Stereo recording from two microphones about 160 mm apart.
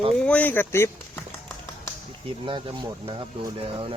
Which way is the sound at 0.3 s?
10° left (ahead or behind).